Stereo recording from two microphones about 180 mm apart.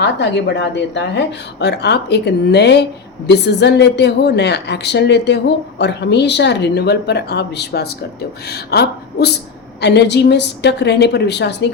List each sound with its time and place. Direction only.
0.0 s a woman's voice: 75° left (ahead or behind)